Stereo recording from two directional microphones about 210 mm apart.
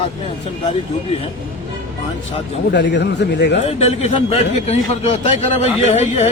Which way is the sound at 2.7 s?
55° left (ahead or behind).